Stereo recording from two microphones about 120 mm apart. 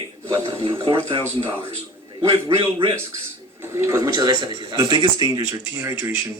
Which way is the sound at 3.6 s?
25° right (ahead or behind).